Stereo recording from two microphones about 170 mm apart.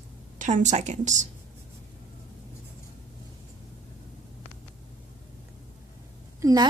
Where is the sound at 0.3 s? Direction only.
45° right (ahead or behind).